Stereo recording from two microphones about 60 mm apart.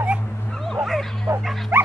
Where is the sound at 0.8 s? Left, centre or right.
Centre.